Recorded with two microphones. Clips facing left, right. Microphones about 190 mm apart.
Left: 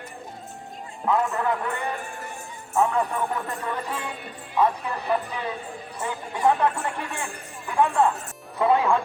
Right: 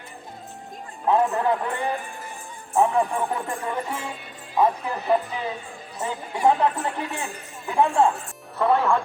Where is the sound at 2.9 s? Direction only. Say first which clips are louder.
Right 2 dB; 25° right (ahead or behind).